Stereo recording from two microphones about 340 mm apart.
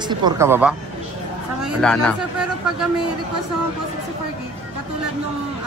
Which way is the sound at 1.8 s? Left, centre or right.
Centre.